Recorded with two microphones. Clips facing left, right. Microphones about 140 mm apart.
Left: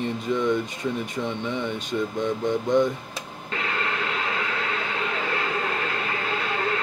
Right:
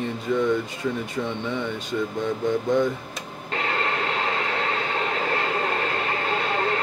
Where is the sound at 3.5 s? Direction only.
35° right (ahead or behind).